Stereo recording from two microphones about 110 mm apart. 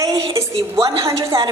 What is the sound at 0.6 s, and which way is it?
Speech, 45° right (ahead or behind).